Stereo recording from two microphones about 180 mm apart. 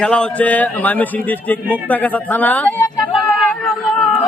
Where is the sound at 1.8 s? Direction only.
10° left (ahead or behind).